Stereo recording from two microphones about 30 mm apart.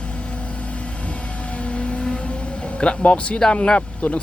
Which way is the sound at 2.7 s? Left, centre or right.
Left.